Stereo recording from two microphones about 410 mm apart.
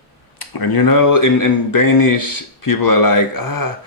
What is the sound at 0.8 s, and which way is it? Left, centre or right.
Speech, left.